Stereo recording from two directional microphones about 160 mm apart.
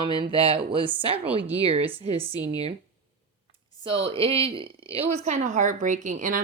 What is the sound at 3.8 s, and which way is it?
Speech, 35° right (ahead or behind).